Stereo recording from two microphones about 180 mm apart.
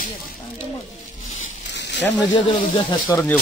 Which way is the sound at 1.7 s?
75° left (ahead or behind).